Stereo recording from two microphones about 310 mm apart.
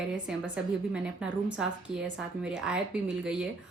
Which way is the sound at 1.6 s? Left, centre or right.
Centre.